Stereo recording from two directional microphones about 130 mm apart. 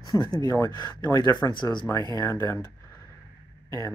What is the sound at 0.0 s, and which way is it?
Speech, 30° left (ahead or behind).